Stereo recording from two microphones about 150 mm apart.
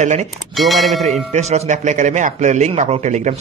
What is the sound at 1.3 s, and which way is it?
A man's voice, 50° right (ahead or behind).